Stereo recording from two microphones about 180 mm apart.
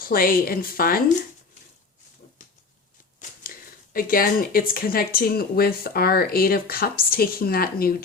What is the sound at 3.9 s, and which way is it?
Speech, 50° left (ahead or behind).